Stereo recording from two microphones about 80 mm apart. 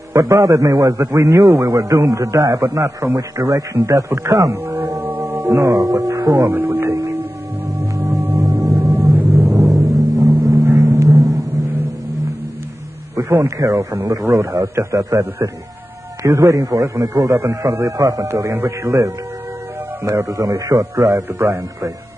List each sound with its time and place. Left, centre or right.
0.1 s a man's voice: right
4.6 s music: right
5.7 s a man's voice: right
6.5 s speech: right
6.9 s speech: right
8.2 s music: right
9.3 s vehicle: right
10.8 s a sound: right
13.6 s a man's voice: right